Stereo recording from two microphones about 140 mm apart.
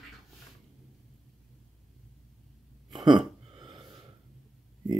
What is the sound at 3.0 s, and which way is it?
Gasp, 35° right (ahead or behind).